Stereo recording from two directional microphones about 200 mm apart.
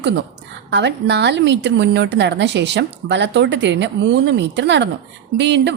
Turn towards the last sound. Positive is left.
turn(degrees=-60)  # may be behind; listen again after turning